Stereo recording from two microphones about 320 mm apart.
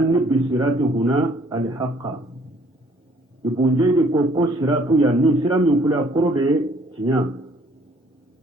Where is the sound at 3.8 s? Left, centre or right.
Centre.